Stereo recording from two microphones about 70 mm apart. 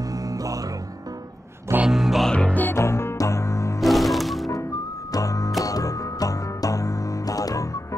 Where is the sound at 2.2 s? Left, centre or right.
Centre.